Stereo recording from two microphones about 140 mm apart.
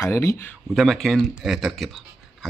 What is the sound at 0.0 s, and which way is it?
Speech, 20° left (ahead or behind).